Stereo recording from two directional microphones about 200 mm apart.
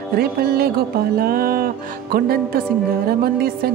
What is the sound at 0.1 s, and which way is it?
Music, 50° right (ahead or behind).